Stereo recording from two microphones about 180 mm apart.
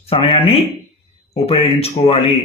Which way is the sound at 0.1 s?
30° left (ahead or behind).